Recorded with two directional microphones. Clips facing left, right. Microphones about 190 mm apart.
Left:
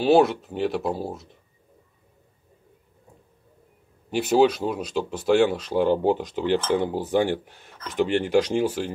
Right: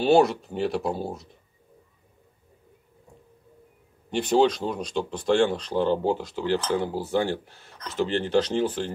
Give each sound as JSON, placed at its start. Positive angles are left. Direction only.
{"t": 0.0, "sound": "speech", "side_deg": 0}
{"t": 4.1, "sound": "speech", "side_deg": 5}